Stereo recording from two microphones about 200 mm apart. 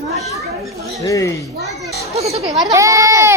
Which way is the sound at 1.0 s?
15° left (ahead or behind).